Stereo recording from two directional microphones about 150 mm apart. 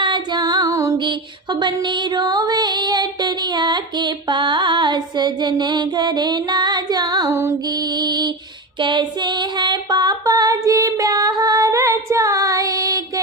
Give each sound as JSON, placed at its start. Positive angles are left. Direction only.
{"t": 0.0, "sound": "music", "side_deg": -30}
{"t": 8.8, "sound": "female singing", "side_deg": -30}